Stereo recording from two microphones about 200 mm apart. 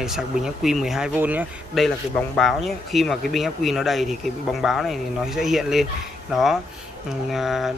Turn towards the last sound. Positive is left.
turn(degrees=0)  # may be behind; listen again after turning